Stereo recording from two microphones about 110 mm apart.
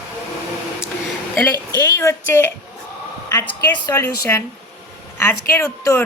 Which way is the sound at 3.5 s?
45° left (ahead or behind).